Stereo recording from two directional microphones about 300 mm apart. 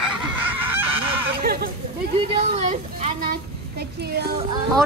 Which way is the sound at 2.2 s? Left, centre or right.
Centre.